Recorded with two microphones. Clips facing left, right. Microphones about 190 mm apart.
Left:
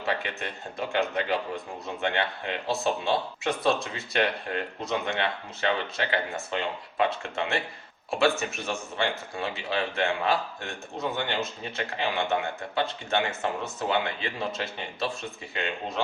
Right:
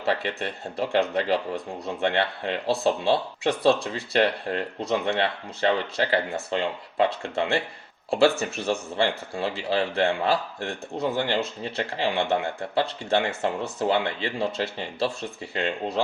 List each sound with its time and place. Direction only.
0.0 s speech: 35° right (ahead or behind)